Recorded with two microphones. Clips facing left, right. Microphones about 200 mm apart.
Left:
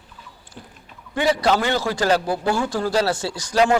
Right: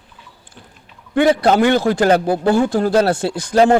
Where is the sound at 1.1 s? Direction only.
55° right (ahead or behind).